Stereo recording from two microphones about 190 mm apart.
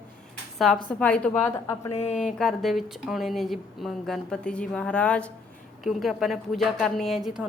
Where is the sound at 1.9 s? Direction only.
35° left (ahead or behind).